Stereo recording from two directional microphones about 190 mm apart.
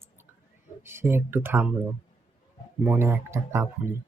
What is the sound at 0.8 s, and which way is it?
Speech, 10° right (ahead or behind).